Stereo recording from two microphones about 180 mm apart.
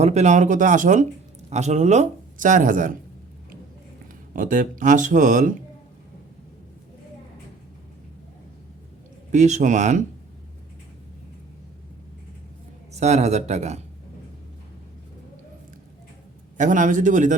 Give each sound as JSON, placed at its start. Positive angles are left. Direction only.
{"t": 0.0, "sound": "speech", "side_deg": -40}
{"t": 4.4, "sound": "speech", "side_deg": -45}
{"t": 9.3, "sound": "speech", "side_deg": -40}
{"t": 12.9, "sound": "speech", "side_deg": -40}
{"t": 16.6, "sound": "speech", "side_deg": -45}